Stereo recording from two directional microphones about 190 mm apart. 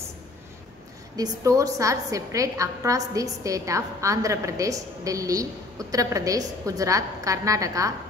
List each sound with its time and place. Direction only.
1.1 s a woman's voice: 20° right (ahead or behind)